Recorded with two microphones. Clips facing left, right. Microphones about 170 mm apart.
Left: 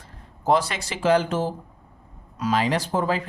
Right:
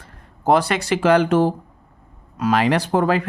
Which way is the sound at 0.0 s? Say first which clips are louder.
Right 5 dB; 60° right (ahead or behind).